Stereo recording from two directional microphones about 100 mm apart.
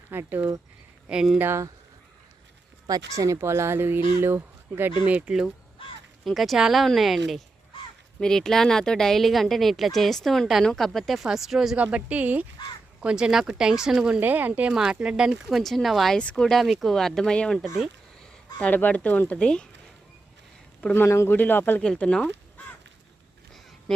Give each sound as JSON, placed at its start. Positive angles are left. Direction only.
{"t": 0.1, "sound": "speech", "side_deg": -20}
{"t": 1.0, "sound": "speech", "side_deg": -5}
{"t": 1.4, "sound": "speech", "side_deg": -25}
{"t": 2.8, "sound": "speech", "side_deg": -35}
{"t": 5.0, "sound": "speech", "side_deg": -10}
{"t": 14.2, "sound": "speech", "side_deg": -20}
{"t": 14.7, "sound": "speech", "side_deg": -5}
{"t": 20.9, "sound": "speech", "side_deg": 25}